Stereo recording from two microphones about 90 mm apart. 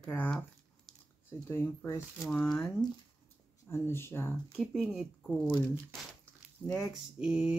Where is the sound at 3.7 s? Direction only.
25° left (ahead or behind).